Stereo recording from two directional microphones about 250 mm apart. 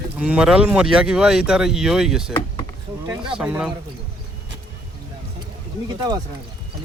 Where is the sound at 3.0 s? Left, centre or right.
Centre.